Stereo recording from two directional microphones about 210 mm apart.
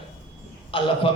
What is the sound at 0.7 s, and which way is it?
Speech, 25° left (ahead or behind).